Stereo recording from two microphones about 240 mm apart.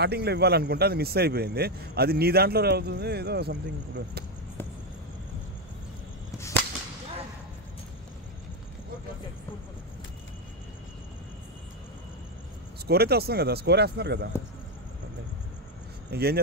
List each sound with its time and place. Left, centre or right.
0.0 s speech: right
12.8 s speech: right
16.1 s speech: right